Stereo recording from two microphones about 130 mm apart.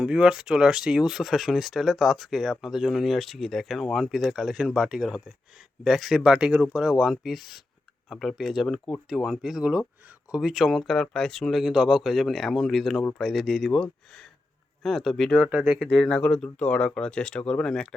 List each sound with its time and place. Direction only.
0.0 s speech: 5° right (ahead or behind)
15.4 s speech: 10° right (ahead or behind)
15.9 s speech: 10° left (ahead or behind)